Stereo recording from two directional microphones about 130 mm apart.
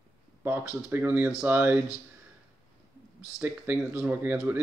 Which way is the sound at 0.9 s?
15° right (ahead or behind).